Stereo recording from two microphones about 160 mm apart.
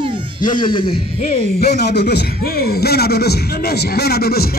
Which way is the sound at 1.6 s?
90° left.